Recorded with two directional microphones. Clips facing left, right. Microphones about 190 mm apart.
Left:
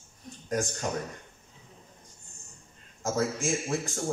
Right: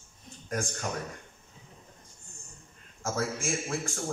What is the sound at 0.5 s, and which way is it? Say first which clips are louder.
Speech: left 3 dB; 20° left (ahead or behind).